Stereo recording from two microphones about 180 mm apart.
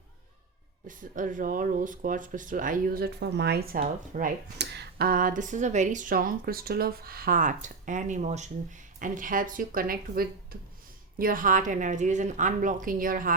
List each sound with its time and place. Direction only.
0.9 s speech: 45° right (ahead or behind)
4.5 s speech: 70° right (ahead or behind); by 10.2 s 55° right (ahead or behind)
10.5 s a sound: 55° right (ahead or behind)
11.2 s speech: 50° right (ahead or behind)